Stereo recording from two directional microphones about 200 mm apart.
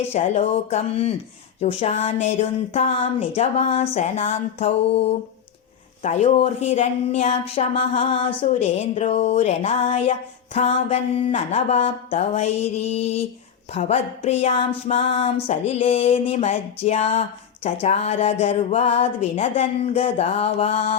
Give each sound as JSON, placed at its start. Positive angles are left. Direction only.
{"t": 0.1, "sound": "speech", "side_deg": 30}